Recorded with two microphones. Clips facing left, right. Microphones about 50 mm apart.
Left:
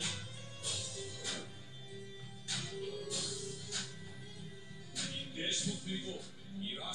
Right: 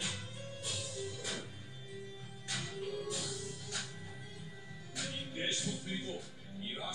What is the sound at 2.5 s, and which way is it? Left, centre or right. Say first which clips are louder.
Music: right 2 dB; centre.